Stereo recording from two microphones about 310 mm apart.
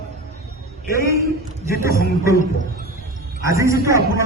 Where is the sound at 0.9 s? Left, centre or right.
Centre.